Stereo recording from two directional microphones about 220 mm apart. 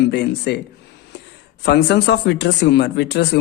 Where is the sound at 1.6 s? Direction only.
50° left (ahead or behind).